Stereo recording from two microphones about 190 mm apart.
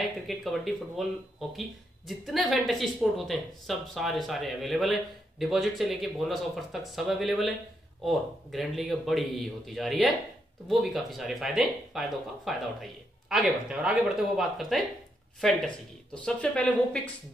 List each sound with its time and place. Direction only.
0.3 s a woman's voice: centre (ahead or behind)